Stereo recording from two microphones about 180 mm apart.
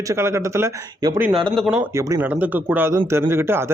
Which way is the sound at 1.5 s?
Centre (ahead or behind).